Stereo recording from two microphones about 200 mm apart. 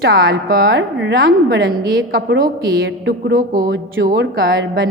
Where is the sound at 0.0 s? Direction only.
50° right (ahead or behind).